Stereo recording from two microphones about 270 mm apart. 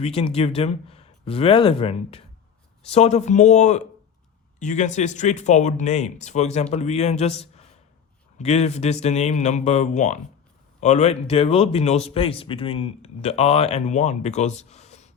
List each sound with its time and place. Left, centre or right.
0.0 s a man's voice: left